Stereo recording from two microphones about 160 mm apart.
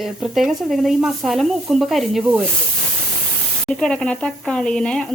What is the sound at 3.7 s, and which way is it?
A woman's voice, 5° left (ahead or behind).